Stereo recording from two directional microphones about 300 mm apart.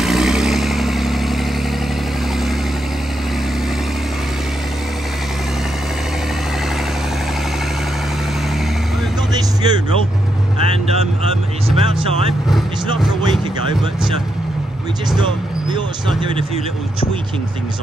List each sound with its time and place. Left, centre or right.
0.0 s vehicle: centre
9.3 s music: centre
11.8 s music: centre